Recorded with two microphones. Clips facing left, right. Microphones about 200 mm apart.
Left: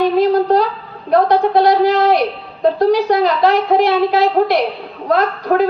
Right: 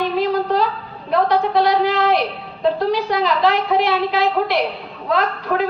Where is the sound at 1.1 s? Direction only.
45° left (ahead or behind).